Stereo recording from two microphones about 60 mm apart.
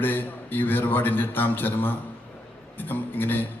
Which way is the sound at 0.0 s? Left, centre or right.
Left.